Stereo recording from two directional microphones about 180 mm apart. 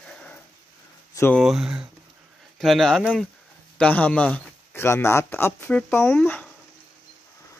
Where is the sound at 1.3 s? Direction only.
Centre (ahead or behind).